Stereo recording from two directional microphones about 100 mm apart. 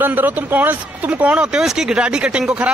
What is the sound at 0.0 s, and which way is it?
Speech, 20° right (ahead or behind).